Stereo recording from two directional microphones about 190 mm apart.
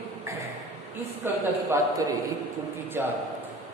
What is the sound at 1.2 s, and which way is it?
A man's voice, 15° right (ahead or behind).